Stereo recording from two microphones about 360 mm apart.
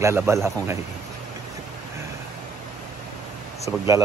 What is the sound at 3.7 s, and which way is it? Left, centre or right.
Speech, centre.